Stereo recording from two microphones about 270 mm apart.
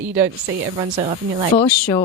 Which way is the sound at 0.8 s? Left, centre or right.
Right.